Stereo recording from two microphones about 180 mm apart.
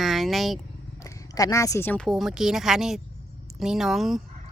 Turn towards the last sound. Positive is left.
turn(degrees=0)  # may be behind; listen again after turning